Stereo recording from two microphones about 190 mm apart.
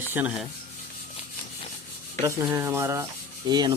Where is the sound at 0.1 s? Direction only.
5° right (ahead or behind).